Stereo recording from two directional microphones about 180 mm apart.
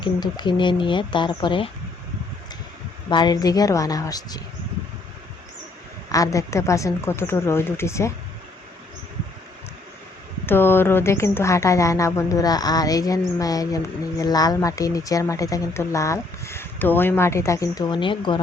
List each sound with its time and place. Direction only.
0.0 s speech: 25° left (ahead or behind)
3.1 s speech: 25° left (ahead or behind)
6.1 s speech: 20° left (ahead or behind)
10.4 s speech: 10° left (ahead or behind); by 18.3 s 25° left (ahead or behind)